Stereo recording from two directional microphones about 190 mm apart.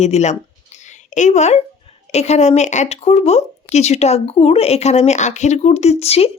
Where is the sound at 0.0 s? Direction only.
35° left (ahead or behind).